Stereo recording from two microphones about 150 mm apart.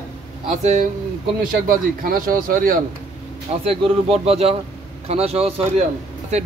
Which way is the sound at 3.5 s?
45° right (ahead or behind).